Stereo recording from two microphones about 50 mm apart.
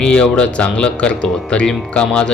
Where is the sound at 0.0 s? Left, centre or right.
Left.